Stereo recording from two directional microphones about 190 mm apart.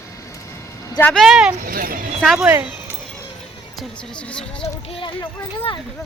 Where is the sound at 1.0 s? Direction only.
5° left (ahead or behind).